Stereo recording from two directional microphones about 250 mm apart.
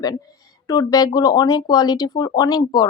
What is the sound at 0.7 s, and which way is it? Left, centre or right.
Speech, centre.